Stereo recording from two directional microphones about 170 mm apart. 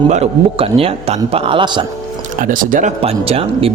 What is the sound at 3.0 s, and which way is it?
Speech, 35° right (ahead or behind).